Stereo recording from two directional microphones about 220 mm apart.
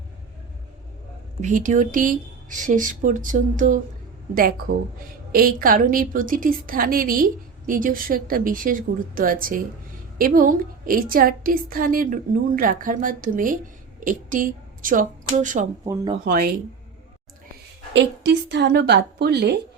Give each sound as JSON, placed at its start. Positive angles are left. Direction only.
{"t": 1.4, "sound": "a woman's voice", "side_deg": -35}
{"t": 17.9, "sound": "a woman's voice", "side_deg": -55}